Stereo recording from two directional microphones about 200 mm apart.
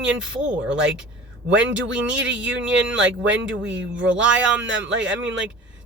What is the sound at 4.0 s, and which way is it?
Speech, 5° right (ahead or behind).